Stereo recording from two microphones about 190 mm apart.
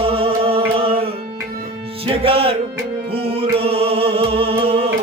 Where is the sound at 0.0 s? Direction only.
30° right (ahead or behind).